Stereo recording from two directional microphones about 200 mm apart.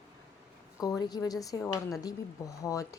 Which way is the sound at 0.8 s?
20° left (ahead or behind).